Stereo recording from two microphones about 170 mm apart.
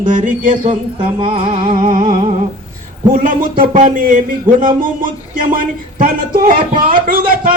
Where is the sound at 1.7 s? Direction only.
50° right (ahead or behind).